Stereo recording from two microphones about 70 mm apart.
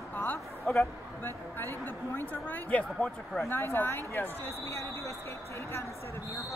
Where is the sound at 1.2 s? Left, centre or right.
Left; by 3.4 s centre.